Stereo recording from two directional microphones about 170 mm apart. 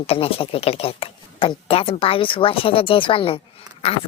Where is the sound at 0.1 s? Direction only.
35° left (ahead or behind).